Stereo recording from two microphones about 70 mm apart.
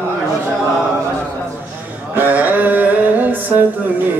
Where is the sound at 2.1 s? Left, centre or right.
Right.